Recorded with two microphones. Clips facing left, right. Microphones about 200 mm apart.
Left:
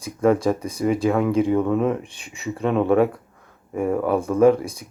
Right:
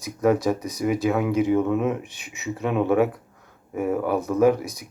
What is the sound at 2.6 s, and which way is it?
Speech, 5° right (ahead or behind).